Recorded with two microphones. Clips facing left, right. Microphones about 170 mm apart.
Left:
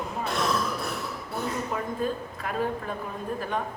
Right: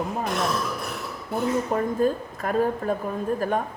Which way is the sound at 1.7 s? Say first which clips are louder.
Right 6 dB; 45° right (ahead or behind).